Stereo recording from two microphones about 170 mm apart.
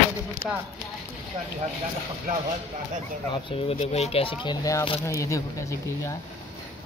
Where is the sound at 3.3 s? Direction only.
35° left (ahead or behind); by 6.2 s 15° left (ahead or behind).